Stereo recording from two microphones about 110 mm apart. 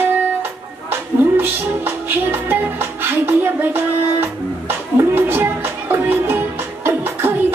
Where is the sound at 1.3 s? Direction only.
20° right (ahead or behind).